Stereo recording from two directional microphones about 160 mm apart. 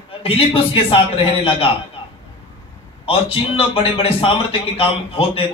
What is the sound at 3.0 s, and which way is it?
A man's voice, 35° left (ahead or behind).